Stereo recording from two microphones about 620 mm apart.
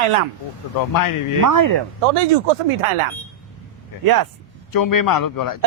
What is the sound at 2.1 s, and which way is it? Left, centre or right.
A man's voice, right.